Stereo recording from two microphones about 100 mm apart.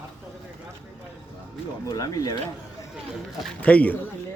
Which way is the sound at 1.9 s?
40° left (ahead or behind).